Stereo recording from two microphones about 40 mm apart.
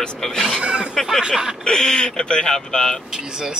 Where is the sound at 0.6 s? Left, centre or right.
Right.